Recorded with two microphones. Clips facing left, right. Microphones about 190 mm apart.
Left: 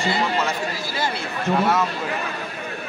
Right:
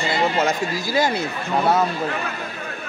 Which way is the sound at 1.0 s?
45° right (ahead or behind).